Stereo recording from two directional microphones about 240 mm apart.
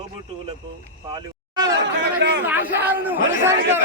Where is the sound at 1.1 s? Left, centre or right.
Centre.